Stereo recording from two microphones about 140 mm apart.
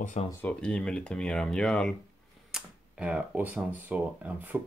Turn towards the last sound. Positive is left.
turn(degrees=-10)  # may be behind; listen again after turning